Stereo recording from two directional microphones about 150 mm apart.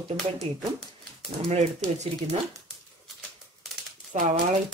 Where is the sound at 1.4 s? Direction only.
45° right (ahead or behind).